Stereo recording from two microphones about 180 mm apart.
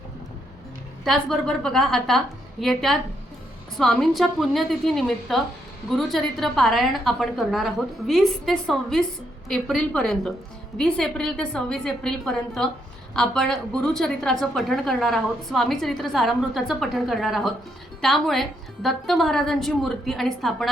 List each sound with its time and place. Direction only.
1.0 s a woman's voice: centre (ahead or behind)